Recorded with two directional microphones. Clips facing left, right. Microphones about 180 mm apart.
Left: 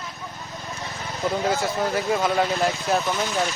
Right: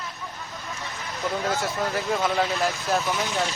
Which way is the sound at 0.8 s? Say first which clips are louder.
Left 4 dB; 35° left (ahead or behind).